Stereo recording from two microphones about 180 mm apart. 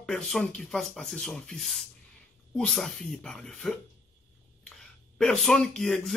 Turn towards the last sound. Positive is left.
turn(degrees=0)  # may be behind; listen again after turning